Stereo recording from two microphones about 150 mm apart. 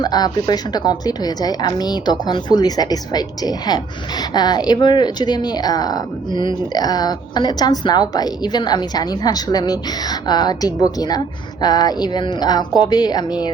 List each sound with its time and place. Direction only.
0.0 s speech: 25° left (ahead or behind)